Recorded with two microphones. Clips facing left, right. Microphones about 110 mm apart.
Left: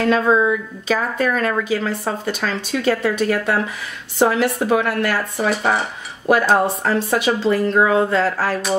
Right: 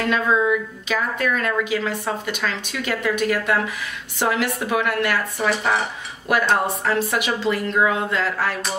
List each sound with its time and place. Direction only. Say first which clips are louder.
0.1 s a woman's voice: left 2 dB; 30° left (ahead or behind)